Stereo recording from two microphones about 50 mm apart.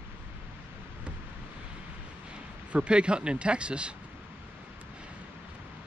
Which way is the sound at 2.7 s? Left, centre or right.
Right.